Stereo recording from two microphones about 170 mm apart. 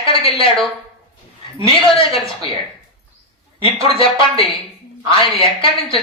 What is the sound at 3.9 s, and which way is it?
Speech, 30° left (ahead or behind).